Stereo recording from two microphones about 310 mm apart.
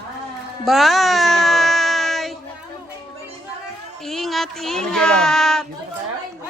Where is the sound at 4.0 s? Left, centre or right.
Centre.